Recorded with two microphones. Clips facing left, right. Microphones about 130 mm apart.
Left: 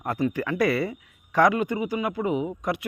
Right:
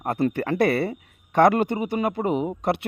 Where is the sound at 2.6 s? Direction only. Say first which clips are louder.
Right 4 dB; 65° right (ahead or behind).